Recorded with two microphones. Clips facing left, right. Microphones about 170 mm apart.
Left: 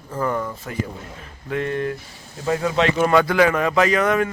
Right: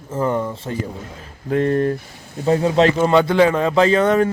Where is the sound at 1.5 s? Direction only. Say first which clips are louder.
Right 6 dB; 40° right (ahead or behind).